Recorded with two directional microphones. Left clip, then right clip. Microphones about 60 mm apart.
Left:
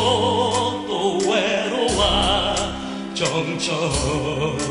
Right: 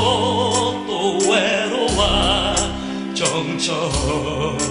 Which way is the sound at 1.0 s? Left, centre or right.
Left.